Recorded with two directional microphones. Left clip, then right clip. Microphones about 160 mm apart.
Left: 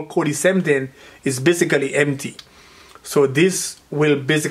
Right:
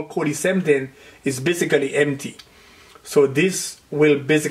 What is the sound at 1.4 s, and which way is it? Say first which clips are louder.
Speech: left 2 dB; 40° left (ahead or behind).